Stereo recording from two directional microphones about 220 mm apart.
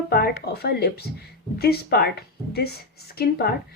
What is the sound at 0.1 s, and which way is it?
Speech, 45° left (ahead or behind).